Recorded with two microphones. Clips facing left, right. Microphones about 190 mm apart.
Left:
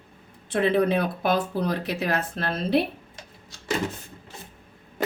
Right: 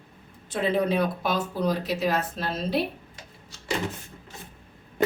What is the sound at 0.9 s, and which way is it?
Speech, 60° left (ahead or behind).